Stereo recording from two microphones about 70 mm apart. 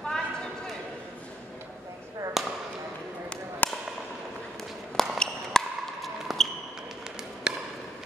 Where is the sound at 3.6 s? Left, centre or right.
Left.